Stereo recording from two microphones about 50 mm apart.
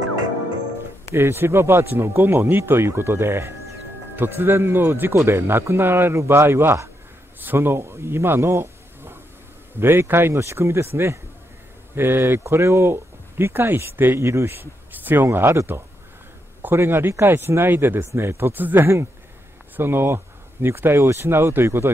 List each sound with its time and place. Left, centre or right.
1.1 s speech: right
4.2 s speech: right
5.1 s speech: right
10.4 s speech: right
11.9 s speech: right
12.6 s speech: right
14.2 s speech: right
14.5 s speech: right
16.7 s speech: right
18.1 s speech: right
18.5 s speech: right